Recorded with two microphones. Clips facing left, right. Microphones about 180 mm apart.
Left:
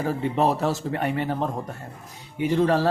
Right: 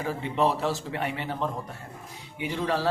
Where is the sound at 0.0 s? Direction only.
45° left (ahead or behind).